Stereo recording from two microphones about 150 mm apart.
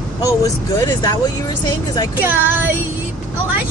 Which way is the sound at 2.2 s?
15° right (ahead or behind).